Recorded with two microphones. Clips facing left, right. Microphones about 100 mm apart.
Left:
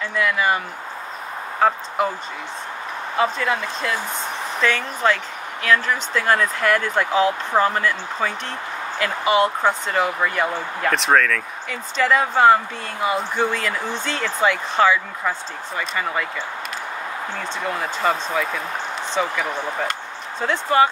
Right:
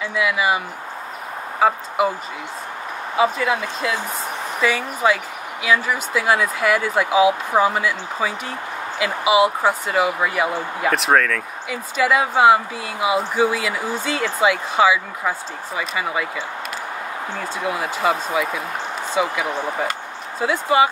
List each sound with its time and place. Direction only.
0.0 s speech: 5° right (ahead or behind)
1.6 s speech: 5° right (ahead or behind)
3.2 s speech: 5° right (ahead or behind)
17.4 s speech: 10° right (ahead or behind)